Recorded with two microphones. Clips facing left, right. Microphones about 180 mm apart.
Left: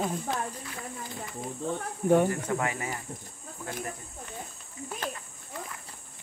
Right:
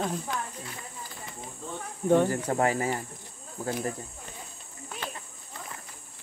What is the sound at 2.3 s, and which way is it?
Speech, 35° right (ahead or behind).